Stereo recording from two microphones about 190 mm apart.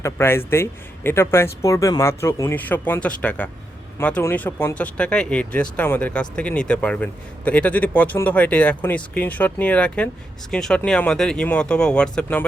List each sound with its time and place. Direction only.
0.0 s a man's voice: 15° left (ahead or behind)